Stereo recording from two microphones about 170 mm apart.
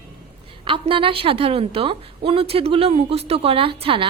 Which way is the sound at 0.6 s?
30° right (ahead or behind).